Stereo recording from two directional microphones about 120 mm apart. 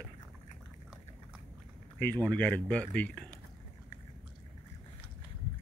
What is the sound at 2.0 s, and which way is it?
Speech, 15° left (ahead or behind).